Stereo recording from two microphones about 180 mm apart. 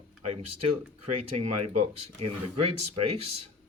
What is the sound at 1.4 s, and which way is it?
Speech, 35° right (ahead or behind).